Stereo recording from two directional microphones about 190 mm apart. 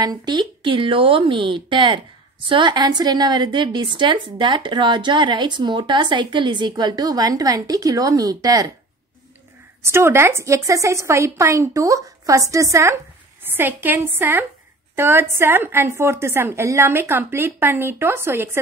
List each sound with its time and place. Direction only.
0.0 s a woman's voice: 20° right (ahead or behind)
9.8 s a woman's voice: 15° right (ahead or behind)